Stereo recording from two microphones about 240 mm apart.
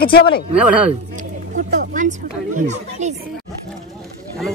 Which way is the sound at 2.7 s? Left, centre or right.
Right.